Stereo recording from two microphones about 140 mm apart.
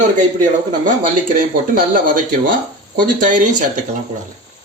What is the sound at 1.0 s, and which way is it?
Speech, 80° right.